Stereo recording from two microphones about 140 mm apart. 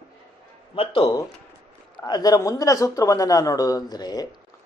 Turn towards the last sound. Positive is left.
turn(degrees=30)  # may be behind; listen again after turning